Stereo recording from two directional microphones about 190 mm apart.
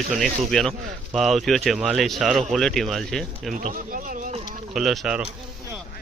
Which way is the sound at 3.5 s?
45° right (ahead or behind).